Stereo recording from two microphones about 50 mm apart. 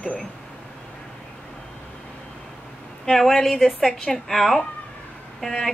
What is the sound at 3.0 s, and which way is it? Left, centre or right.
A woman's voice, centre.